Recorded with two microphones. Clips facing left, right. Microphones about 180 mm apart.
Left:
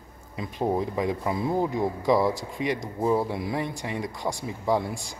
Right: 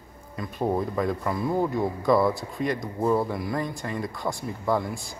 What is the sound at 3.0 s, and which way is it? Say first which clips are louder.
A man's voice: even; 10° left (ahead or behind).